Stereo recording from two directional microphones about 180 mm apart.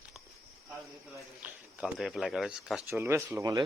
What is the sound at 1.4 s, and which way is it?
Speech, centre (ahead or behind).